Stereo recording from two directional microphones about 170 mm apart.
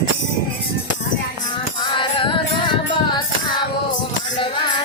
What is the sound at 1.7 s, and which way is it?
Music, 30° left (ahead or behind).